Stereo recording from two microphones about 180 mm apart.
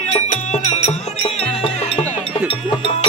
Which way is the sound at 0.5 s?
35° left (ahead or behind).